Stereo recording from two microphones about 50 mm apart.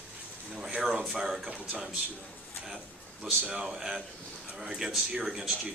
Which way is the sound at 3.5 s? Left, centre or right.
Centre.